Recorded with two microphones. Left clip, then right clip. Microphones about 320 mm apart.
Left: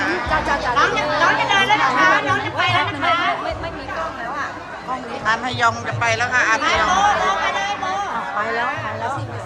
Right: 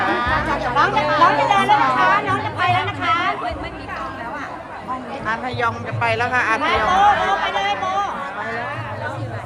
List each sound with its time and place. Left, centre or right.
1.2 s chatter: centre
5.2 s speech: centre
6.6 s speech: right